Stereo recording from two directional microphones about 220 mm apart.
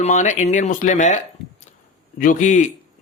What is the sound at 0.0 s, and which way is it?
Speech, 35° left (ahead or behind).